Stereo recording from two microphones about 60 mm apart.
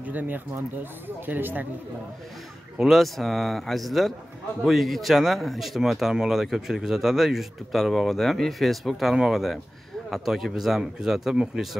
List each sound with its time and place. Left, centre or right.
0.0 s speech: right
2.8 s speech: centre